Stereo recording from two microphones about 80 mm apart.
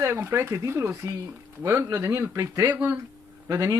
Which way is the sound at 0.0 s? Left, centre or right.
Right.